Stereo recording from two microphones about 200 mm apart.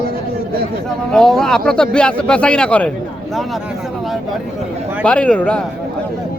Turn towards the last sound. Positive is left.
turn(degrees=5)  # may be behind; listen again after turning